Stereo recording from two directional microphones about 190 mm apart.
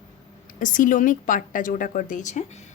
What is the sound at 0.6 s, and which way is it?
A woman's voice, 45° left (ahead or behind).